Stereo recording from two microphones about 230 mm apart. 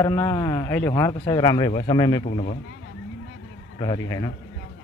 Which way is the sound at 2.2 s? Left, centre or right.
Left.